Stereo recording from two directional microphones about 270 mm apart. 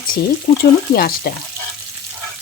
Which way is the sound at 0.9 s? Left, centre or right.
Left.